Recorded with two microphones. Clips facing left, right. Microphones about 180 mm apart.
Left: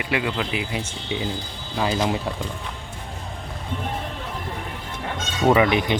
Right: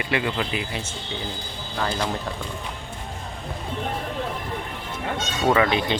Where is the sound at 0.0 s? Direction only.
10° left (ahead or behind).